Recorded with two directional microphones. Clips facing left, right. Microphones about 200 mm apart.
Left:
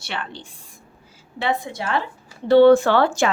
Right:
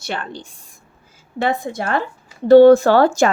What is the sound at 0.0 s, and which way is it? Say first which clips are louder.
A woman's voice: right 4 dB; 45° right (ahead or behind).